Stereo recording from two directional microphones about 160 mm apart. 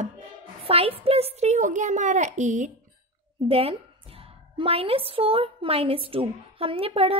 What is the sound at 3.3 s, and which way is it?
A woman's voice, 35° right (ahead or behind).